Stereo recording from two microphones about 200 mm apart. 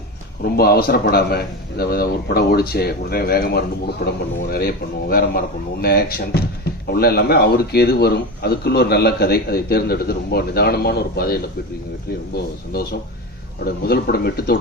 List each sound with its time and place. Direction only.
0.4 s a man's voice: 50° left (ahead or behind)